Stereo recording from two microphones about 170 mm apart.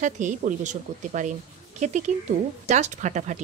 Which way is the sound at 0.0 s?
45° right (ahead or behind).